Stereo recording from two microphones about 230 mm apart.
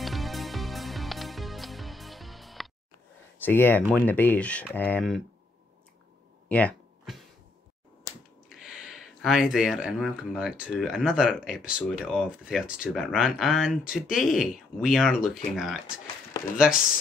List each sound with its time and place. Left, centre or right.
0.0 s music: centre
3.3 s speech: centre
6.5 s a sound: centre
8.5 s speech: centre